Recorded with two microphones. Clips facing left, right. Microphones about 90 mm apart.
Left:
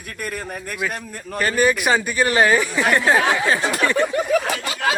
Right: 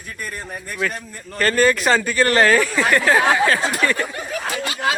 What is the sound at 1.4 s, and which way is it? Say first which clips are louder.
Speech: right 2 dB; 10° left (ahead or behind).